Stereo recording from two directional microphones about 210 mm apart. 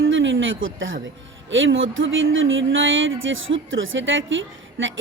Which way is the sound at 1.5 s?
65° right (ahead or behind).